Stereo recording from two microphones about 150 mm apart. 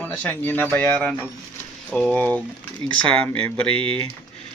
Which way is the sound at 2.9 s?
35° right (ahead or behind).